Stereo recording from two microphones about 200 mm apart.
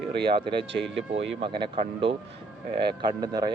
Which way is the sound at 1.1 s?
70° right (ahead or behind).